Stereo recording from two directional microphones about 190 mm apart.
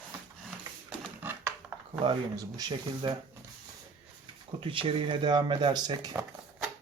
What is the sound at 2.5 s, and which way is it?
Speech, 20° right (ahead or behind).